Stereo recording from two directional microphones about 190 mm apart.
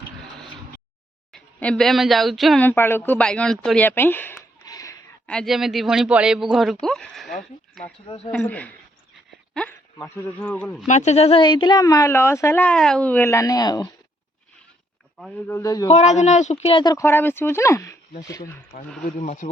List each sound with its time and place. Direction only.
1.3 s speech: 5° left (ahead or behind)
5.2 s speech: 5° left (ahead or behind)
8.0 s speech: 30° left (ahead or behind)
8.3 s speech: 5° left (ahead or behind)
10.8 s speech: 35° left (ahead or behind); by 13.9 s 20° left (ahead or behind)
15.4 s speech: 15° left (ahead or behind)
15.9 s speech: 35° left (ahead or behind); by 18.4 s 15° left (ahead or behind)
19.0 s speech: 40° left (ahead or behind)